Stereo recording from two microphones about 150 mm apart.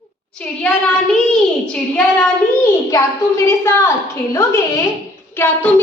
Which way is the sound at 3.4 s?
20° left (ahead or behind).